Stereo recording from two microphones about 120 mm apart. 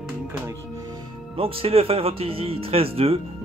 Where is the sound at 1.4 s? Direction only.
50° right (ahead or behind).